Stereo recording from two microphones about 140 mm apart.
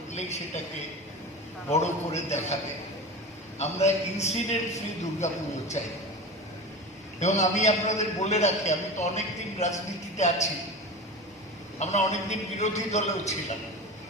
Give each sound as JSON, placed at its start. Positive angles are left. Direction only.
{"t": 0.1, "sound": "a man's voice", "side_deg": 55}
{"t": 1.7, "sound": "a man's voice", "side_deg": 55}
{"t": 3.6, "sound": "a man's voice", "side_deg": 50}
{"t": 7.2, "sound": "a man's voice", "side_deg": 55}
{"t": 11.8, "sound": "a man's voice", "side_deg": 55}